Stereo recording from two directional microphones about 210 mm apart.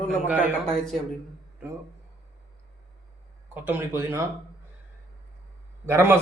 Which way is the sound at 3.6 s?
10° right (ahead or behind).